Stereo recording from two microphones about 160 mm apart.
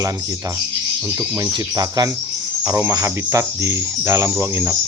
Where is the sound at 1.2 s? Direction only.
15° right (ahead or behind).